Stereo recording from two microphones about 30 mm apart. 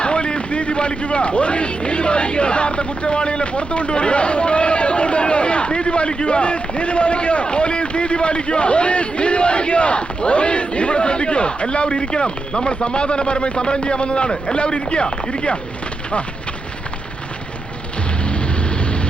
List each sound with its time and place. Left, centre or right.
0.0 s speech: left